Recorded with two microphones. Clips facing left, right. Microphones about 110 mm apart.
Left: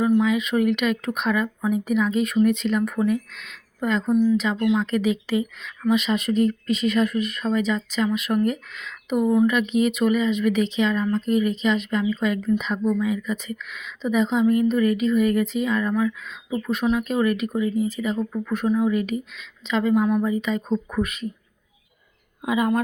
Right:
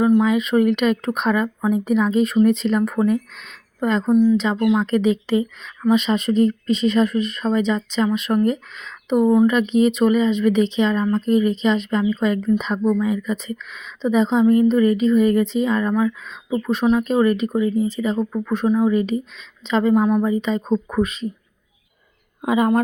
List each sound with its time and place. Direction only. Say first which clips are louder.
0.2 s speech: right 4 dB; 35° right (ahead or behind)
4.2 s speech: right 4 dB; 20° right (ahead or behind)
4.7 s speech: right 4 dB; 35° right (ahead or behind)
22.4 s speech: right 4 dB; 35° right (ahead or behind)